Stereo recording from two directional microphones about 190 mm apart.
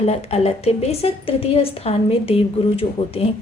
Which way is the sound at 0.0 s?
35° left (ahead or behind).